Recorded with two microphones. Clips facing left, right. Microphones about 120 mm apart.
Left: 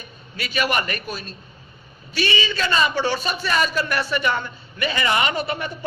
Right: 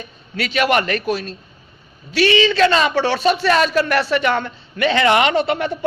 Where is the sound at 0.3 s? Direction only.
90° right.